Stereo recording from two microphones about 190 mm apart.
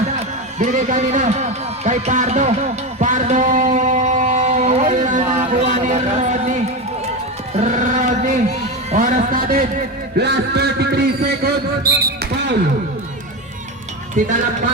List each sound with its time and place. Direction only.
0.6 s a man's voice: 40° right (ahead or behind)
5.5 s a sound: 40° right (ahead or behind)
10.2 s a man's voice: 60° right (ahead or behind)
11.4 s basketball bounce: 55° right (ahead or behind)
14.2 s speech: 40° right (ahead or behind)